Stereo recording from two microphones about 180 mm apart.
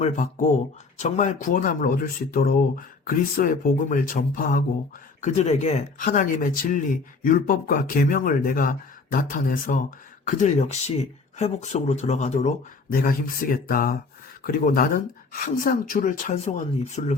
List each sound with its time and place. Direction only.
0.0 s speech: 40° left (ahead or behind)
5.2 s speech: 40° left (ahead or behind)
12.9 s speech: 50° left (ahead or behind)